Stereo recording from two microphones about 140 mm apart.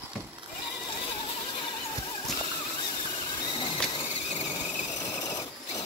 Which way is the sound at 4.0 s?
50° left (ahead or behind).